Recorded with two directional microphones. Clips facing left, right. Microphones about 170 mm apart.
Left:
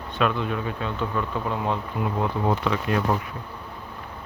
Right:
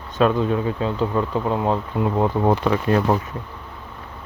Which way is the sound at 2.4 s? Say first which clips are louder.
Right 5 dB; 40° right (ahead or behind).